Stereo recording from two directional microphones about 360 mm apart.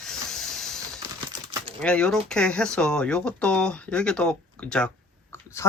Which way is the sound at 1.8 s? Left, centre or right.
Centre.